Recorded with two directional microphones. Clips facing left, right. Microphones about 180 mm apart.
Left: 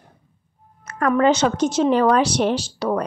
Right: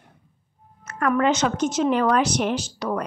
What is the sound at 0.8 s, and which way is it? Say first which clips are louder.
A woman's voice: left 3 dB; 35° left (ahead or behind).